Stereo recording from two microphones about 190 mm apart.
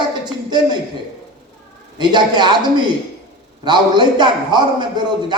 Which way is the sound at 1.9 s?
25° right (ahead or behind).